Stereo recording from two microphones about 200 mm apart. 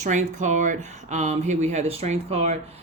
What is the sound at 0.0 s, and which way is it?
Speech, 35° right (ahead or behind).